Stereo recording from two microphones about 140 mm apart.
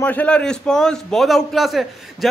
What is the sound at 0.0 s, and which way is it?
A man's voice, 10° left (ahead or behind).